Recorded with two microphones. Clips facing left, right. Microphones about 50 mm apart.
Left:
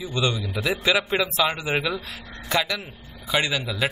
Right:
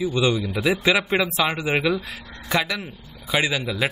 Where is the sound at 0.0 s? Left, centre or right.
Centre.